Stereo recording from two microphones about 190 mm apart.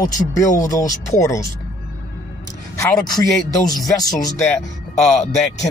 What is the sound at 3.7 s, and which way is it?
Speech, 20° left (ahead or behind).